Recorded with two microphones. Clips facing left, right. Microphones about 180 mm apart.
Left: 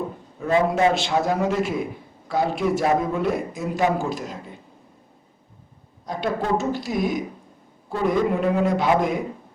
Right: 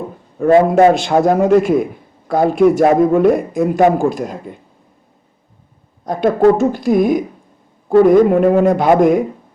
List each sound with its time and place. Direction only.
0.3 s a man's voice: 50° right (ahead or behind)
6.1 s a man's voice: 50° right (ahead or behind)